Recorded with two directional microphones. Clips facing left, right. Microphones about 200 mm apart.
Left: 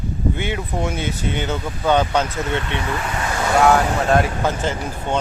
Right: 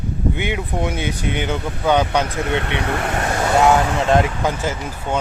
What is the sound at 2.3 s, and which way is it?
Speech, 60° right (ahead or behind).